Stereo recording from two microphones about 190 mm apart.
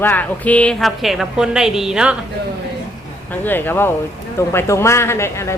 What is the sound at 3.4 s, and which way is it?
A woman's voice, 10° left (ahead or behind).